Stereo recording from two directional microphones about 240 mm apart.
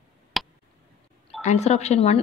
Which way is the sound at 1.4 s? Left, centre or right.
Left.